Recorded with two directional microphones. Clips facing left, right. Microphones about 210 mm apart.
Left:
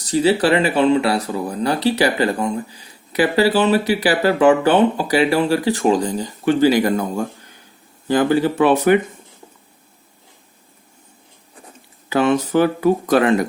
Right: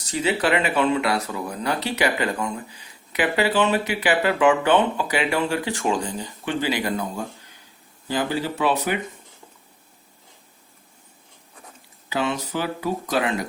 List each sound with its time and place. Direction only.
0.1 s speech: 35° left (ahead or behind); by 9.0 s 50° left (ahead or behind)
12.0 s speech: 55° left (ahead or behind)